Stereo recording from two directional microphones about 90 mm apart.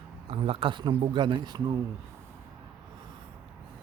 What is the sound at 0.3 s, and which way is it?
Speech, 90° right.